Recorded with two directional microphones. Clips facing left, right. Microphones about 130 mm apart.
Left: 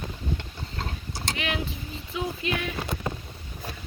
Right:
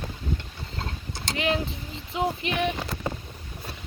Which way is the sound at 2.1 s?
25° right (ahead or behind).